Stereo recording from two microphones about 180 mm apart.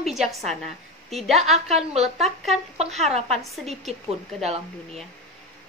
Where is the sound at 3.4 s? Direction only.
Centre (ahead or behind).